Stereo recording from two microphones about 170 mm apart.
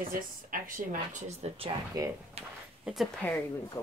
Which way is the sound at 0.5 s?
50° right (ahead or behind).